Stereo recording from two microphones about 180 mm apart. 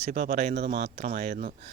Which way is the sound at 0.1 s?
55° right (ahead or behind).